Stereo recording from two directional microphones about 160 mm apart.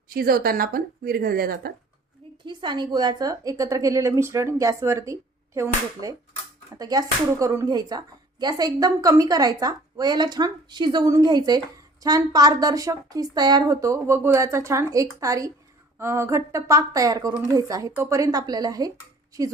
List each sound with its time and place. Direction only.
0.1 s a woman's voice: 65° right (ahead or behind)
2.4 s speech: 30° right (ahead or behind)